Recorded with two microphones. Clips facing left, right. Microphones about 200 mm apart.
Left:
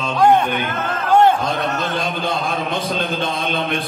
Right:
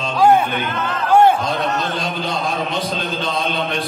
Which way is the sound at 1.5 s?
50° left (ahead or behind).